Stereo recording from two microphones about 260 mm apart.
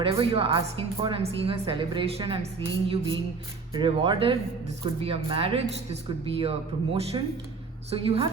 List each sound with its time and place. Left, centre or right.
0.0 s a woman's voice: right